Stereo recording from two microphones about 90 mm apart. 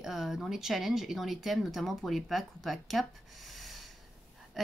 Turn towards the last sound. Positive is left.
turn(degrees=0)  # may be behind; listen again after turning